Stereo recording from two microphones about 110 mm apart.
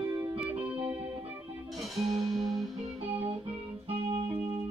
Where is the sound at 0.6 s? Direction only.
10° right (ahead or behind).